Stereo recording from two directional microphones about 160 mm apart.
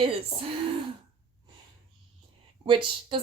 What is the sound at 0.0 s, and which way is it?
Speech, 35° right (ahead or behind).